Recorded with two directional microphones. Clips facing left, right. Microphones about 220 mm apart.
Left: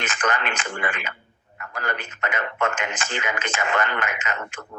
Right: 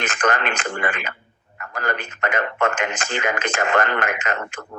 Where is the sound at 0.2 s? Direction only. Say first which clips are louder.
Right 4 dB; 45° right (ahead or behind).